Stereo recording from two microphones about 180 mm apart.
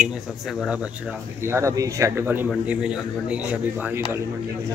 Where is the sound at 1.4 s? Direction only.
15° right (ahead or behind).